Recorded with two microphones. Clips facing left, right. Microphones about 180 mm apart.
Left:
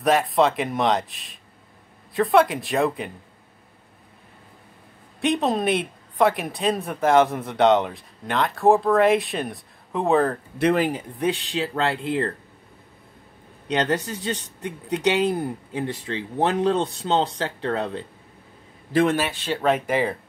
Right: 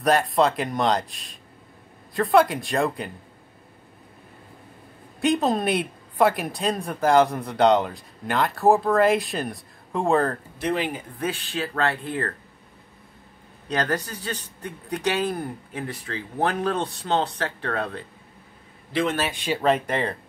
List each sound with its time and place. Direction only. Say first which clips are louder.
0.0 s speech: left 1 dB; centre (ahead or behind)
5.2 s speech: even; centre (ahead or behind)
10.6 s speech: left 6 dB; 50° left (ahead or behind)
11.1 s speech: left 4 dB; 20° left (ahead or behind)
14.3 s speech: left 3 dB; 20° left (ahead or behind)
18.9 s a man's voice: left 5 dB; 50° left (ahead or behind)
19.2 s speech: even; 10° right (ahead or behind)
19.6 s speech: left 2 dB; 5° left (ahead or behind)